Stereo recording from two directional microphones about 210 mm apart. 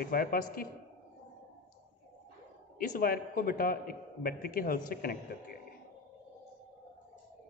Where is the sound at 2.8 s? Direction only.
45° left (ahead or behind).